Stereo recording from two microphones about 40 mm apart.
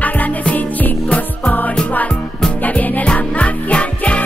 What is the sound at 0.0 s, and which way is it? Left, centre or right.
Music, left.